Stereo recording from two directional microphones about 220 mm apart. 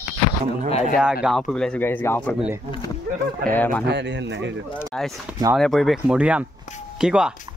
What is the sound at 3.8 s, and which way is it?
Speech, 50° right (ahead or behind).